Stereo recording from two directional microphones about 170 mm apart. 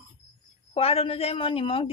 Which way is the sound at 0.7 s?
35° left (ahead or behind).